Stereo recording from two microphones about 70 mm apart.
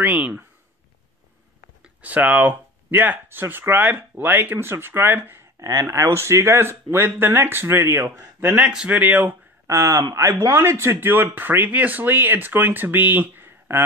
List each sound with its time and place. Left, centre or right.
0.0 s speech: right
1.8 s speech: right
5.6 s speech: right
6.0 s speech: right
8.6 s speech: centre
9.7 s speech: right